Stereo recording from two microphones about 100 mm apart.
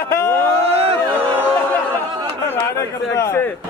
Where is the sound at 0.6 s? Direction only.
85° right.